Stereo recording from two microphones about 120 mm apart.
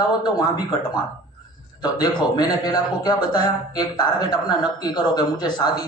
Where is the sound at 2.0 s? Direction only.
35° left (ahead or behind).